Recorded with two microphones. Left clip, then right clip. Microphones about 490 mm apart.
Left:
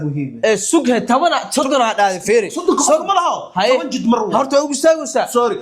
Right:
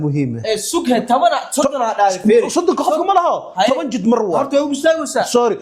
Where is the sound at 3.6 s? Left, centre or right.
Left.